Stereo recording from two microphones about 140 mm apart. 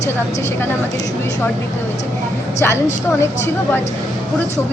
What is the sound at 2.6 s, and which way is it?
Speech, 20° left (ahead or behind).